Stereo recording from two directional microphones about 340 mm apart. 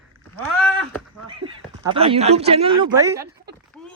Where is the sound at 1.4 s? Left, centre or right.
Centre.